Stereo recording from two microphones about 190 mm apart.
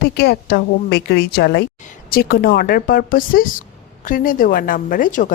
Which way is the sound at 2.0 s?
50° left (ahead or behind).